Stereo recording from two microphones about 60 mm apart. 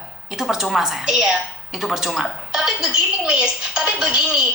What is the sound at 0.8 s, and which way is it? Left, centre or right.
Speech, centre.